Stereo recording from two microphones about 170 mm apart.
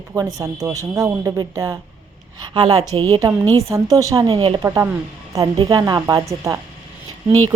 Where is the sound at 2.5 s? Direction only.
30° right (ahead or behind).